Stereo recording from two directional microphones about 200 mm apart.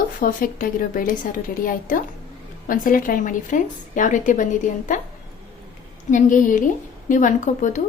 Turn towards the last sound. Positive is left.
turn(degrees=40)  # may be behind; listen again after turning